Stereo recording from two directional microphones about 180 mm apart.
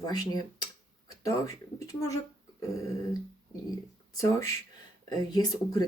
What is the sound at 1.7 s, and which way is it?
Speech, 20° left (ahead or behind).